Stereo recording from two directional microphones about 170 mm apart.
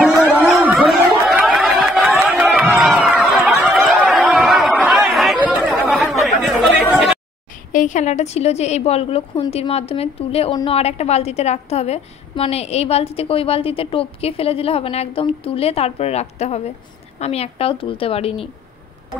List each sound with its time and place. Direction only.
0.6 s chatter: centre (ahead or behind)
2.4 s run: 10° right (ahead or behind)
2.8 s a sound: 5° right (ahead or behind)
5.6 s chatter: centre (ahead or behind)
7.7 s a woman's voice: 45° left (ahead or behind)